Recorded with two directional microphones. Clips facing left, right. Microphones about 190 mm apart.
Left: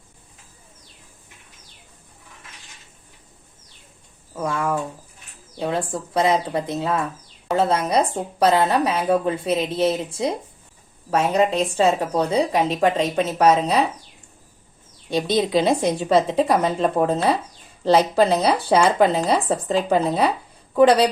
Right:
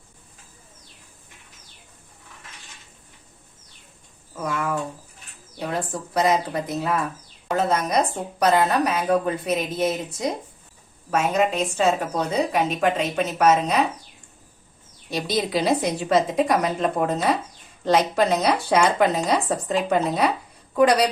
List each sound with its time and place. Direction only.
4.4 s a woman's voice: 30° left (ahead or behind)
15.1 s a woman's voice: 25° left (ahead or behind)